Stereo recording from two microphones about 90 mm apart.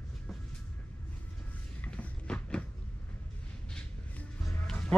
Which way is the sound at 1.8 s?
15° left (ahead or behind).